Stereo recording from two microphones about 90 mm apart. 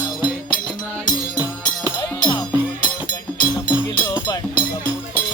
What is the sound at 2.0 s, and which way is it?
Music, 50° left (ahead or behind).